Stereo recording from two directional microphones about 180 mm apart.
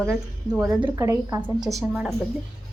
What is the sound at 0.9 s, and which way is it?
A woman's voice, 15° right (ahead or behind).